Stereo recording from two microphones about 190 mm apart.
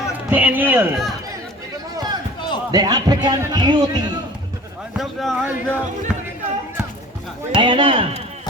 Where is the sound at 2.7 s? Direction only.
20° right (ahead or behind).